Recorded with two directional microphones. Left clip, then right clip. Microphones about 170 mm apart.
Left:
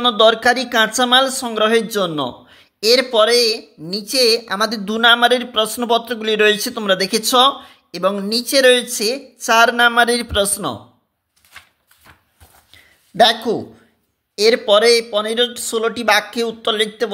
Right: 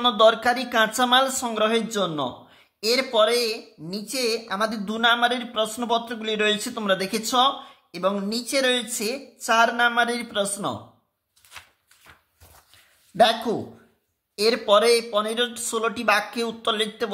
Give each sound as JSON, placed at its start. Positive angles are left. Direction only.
{"t": 0.0, "sound": "speech", "side_deg": 20}
{"t": 13.1, "sound": "speech", "side_deg": 30}